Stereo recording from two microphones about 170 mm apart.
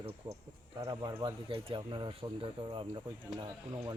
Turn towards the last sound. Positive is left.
turn(degrees=-25)  # may be behind; listen again after turning